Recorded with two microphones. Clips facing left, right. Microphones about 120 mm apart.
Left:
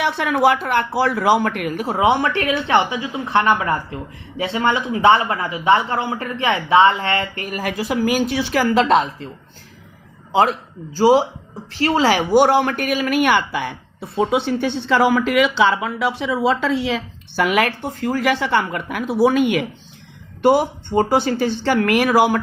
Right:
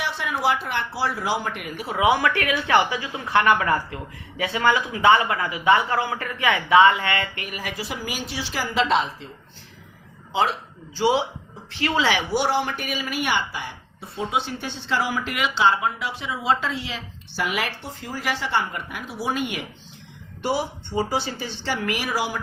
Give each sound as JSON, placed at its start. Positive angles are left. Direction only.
{"t": 0.0, "sound": "speech", "side_deg": 65}
{"t": 2.0, "sound": "speech", "side_deg": 25}
{"t": 10.9, "sound": "speech", "side_deg": 40}
{"t": 16.8, "sound": "speech", "side_deg": 65}
{"t": 20.4, "sound": "speech", "side_deg": 50}